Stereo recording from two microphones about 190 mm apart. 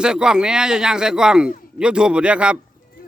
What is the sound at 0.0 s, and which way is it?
A man's voice, 5° right (ahead or behind).